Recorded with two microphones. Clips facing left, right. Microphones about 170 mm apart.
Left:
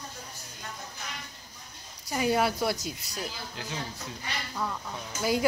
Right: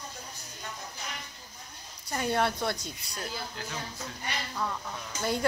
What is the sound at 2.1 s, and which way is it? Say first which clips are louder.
Speech: left 2 dB; 5° left (ahead or behind).